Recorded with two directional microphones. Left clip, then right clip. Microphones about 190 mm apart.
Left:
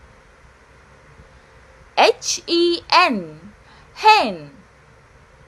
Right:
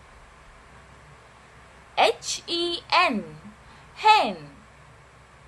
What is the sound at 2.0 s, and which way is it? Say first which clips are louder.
A woman's voice: left 6 dB; 25° left (ahead or behind).